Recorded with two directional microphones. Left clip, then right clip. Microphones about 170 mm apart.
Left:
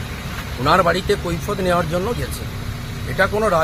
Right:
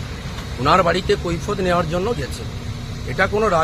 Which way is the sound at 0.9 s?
30° right (ahead or behind).